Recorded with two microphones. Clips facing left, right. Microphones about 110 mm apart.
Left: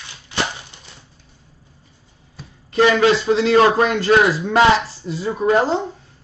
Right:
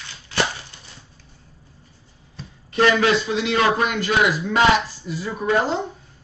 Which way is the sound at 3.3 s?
35° left (ahead or behind).